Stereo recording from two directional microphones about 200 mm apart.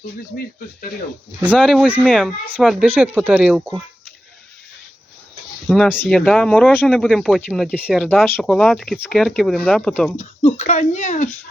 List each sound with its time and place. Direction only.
0.3 s speech: 50° left (ahead or behind)
1.5 s speech: centre (ahead or behind)
5.6 s speech: centre (ahead or behind)
8.0 s speech: 5° left (ahead or behind)
10.2 s speech: 35° left (ahead or behind)